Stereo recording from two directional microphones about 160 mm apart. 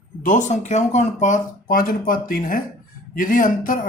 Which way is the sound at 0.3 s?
50° left (ahead or behind).